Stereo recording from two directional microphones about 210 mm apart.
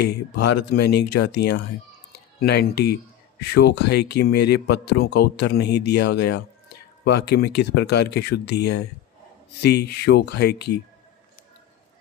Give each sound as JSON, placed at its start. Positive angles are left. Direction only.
{"t": 0.0, "sound": "speech", "side_deg": 50}